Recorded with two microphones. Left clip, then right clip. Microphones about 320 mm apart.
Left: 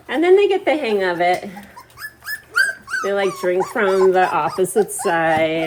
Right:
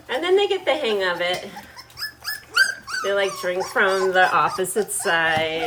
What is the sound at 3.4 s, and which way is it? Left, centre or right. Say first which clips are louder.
Speech: left 2 dB; centre.